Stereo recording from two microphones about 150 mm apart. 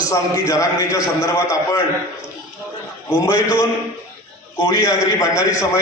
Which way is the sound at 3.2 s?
20° left (ahead or behind).